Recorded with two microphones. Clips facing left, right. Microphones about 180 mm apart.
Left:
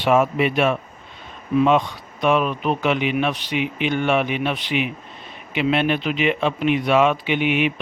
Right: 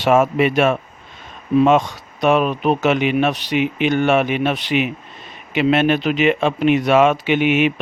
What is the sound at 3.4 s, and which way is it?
Speech, 70° right (ahead or behind).